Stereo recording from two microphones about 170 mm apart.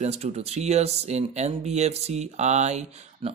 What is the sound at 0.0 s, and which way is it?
Speech, 40° right (ahead or behind).